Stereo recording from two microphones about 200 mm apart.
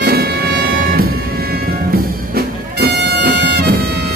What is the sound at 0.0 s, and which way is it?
Music, 50° right (ahead or behind).